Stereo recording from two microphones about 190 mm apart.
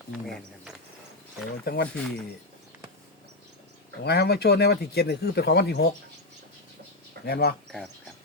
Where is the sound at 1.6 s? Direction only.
55° left (ahead or behind).